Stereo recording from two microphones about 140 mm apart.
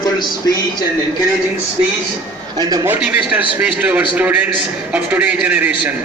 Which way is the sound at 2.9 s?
10° right (ahead or behind).